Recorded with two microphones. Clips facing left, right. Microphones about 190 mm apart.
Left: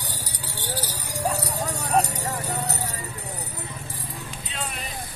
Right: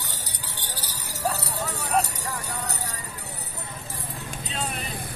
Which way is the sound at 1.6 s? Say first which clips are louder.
Left 2 dB; 35° left (ahead or behind).